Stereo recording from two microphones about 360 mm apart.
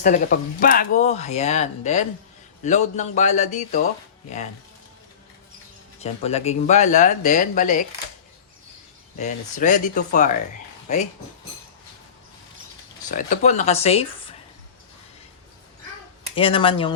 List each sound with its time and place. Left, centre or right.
0.0 s speech: left
6.0 s speech: centre
9.1 s speech: centre
13.1 s speech: left
16.3 s speech: centre